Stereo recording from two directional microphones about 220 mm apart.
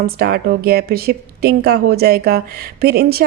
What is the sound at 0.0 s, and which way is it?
Speech, 45° right (ahead or behind).